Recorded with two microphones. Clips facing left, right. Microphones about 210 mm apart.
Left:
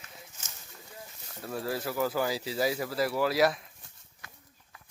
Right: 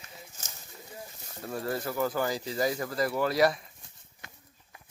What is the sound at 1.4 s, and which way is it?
Speech, centre (ahead or behind).